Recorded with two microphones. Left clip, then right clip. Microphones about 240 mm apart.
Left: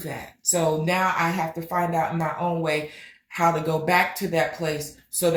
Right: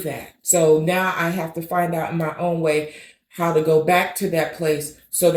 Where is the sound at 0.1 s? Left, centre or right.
Centre.